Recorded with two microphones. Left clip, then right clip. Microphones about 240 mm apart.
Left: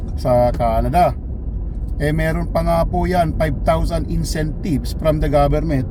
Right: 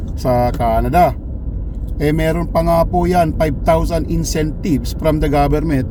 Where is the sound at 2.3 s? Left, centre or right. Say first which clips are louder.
Right 4 dB; centre.